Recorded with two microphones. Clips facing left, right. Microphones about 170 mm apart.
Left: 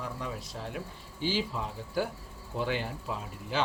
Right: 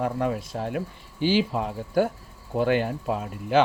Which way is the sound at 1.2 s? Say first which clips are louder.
Right 9 dB; 70° right (ahead or behind).